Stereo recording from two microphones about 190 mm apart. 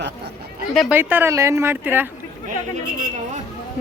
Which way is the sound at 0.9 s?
10° right (ahead or behind).